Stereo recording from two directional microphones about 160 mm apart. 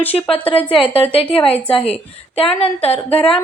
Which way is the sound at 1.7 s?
40° left (ahead or behind).